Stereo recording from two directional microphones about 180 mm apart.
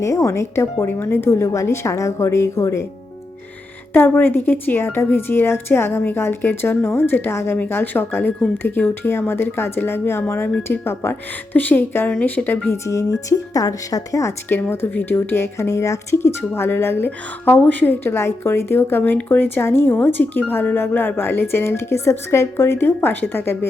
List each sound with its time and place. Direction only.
0.0 s speech: 15° left (ahead or behind)
3.9 s speech: 10° left (ahead or behind)